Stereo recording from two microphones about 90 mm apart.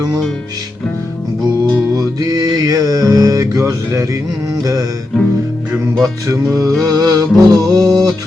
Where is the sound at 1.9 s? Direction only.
45° right (ahead or behind).